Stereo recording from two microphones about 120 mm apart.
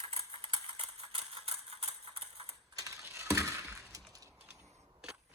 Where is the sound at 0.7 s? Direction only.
50° right (ahead or behind).